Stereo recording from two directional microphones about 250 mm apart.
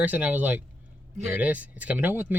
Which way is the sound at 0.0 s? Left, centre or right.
Centre.